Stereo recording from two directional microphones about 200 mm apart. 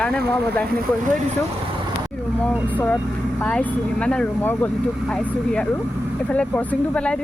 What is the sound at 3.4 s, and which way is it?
Speech, 5° left (ahead or behind).